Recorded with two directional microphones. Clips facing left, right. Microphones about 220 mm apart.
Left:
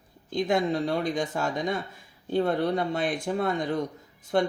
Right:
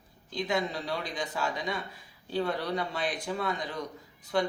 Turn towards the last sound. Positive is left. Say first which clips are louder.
# left 4 dB
turn(degrees=50)  # may be behind; listen again after turning